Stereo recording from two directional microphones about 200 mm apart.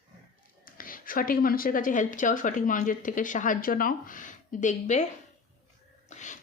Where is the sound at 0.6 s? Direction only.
45° left (ahead or behind).